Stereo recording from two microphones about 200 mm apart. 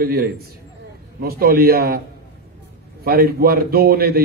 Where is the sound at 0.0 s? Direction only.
50° right (ahead or behind).